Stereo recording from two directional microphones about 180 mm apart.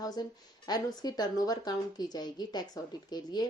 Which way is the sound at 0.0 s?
20° left (ahead or behind).